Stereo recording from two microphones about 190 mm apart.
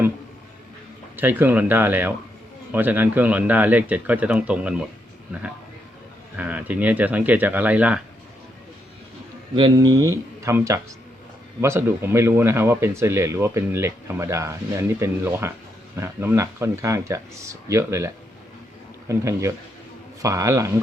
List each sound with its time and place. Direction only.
1.1 s speech: 10° right (ahead or behind)
6.3 s speech: 10° right (ahead or behind)
9.6 s speech: 25° right (ahead or behind)